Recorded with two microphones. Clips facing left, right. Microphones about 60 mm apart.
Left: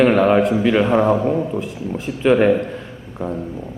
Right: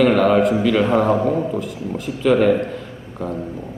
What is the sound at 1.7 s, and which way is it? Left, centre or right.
Speech, left.